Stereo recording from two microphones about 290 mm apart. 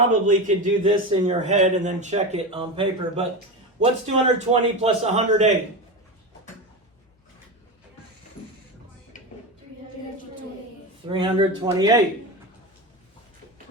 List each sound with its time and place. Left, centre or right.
0.1 s a man's voice: right
11.1 s a man's voice: centre